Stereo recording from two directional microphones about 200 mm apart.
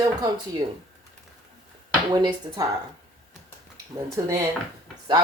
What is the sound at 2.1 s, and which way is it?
Speech, 20° right (ahead or behind).